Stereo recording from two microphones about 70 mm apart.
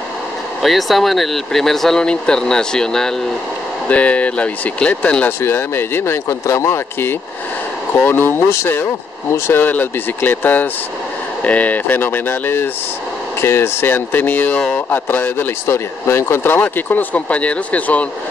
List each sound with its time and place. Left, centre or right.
0.6 s speech: centre
3.9 s speech: centre
5.4 s speech: left
6.2 s speech: left
8.0 s speech: left
16.5 s speech: left